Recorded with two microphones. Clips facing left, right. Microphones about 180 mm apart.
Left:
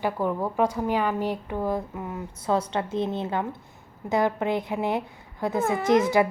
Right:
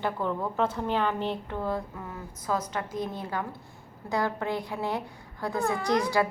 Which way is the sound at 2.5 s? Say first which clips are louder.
Left 5 dB; 30° left (ahead or behind).